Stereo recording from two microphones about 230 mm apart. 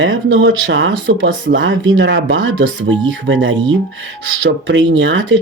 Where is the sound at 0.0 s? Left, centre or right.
Right.